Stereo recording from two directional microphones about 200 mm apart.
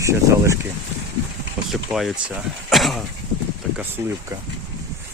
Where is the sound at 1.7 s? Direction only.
Centre (ahead or behind).